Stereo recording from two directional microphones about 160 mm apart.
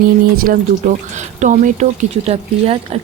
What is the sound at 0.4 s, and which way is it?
A woman's voice, 60° right (ahead or behind).